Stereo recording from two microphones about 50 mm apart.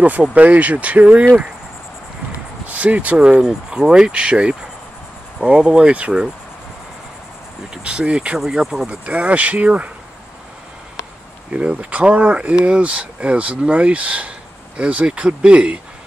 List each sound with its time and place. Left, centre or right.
0.3 s speech: right
2.6 s speech: right
3.2 s speech: centre
7.7 s speech: centre
8.4 s speech: centre
8.8 s speech: right
11.5 s speech: right